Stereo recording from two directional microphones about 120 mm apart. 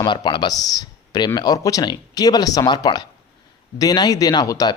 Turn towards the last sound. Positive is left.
turn(degrees=30)  # may be behind; listen again after turning